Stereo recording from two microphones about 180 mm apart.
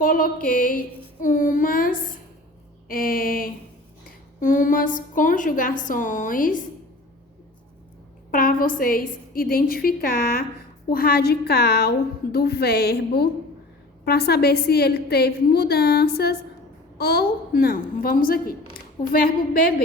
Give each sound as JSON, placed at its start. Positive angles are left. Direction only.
{"t": 0.0, "sound": "a woman's voice", "side_deg": 50}
{"t": 1.2, "sound": "child singing", "side_deg": 50}
{"t": 2.9, "sound": "a sound", "side_deg": 55}
{"t": 4.4, "sound": "a woman's voice", "side_deg": 50}
{"t": 8.3, "sound": "a woman's voice", "side_deg": 50}